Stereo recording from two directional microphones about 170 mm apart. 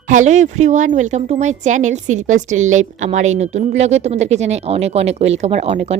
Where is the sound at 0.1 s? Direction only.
45° right (ahead or behind).